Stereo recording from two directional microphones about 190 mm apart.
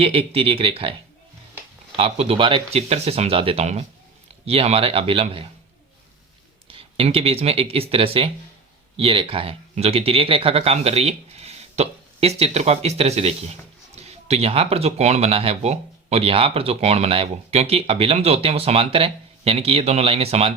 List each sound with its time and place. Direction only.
0.0 s a man's voice: 30° right (ahead or behind)
2.0 s a man's voice: 30° right (ahead or behind)
6.7 s speech: 30° right (ahead or behind)